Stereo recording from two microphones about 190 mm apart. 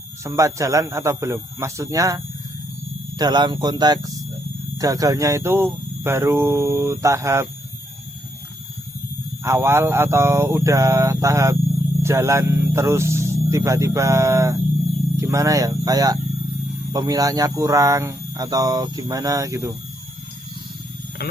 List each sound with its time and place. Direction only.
0.3 s speech: 15° right (ahead or behind)
9.4 s speech: 15° right (ahead or behind)